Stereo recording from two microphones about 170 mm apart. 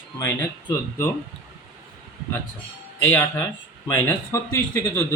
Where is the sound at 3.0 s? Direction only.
15° left (ahead or behind).